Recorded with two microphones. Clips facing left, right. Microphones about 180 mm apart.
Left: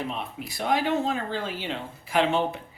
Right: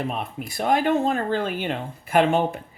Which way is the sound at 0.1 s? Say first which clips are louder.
Right 4 dB; 50° right (ahead or behind).